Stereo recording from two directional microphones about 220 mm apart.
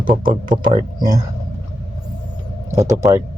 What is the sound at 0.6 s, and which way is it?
Speech, 20° right (ahead or behind).